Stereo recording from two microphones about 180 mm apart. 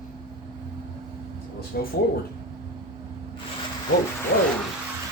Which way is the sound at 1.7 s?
65° left (ahead or behind).